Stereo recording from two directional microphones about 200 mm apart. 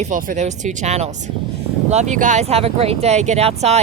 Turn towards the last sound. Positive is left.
turn(degrees=-35)  # may be behind; listen again after turning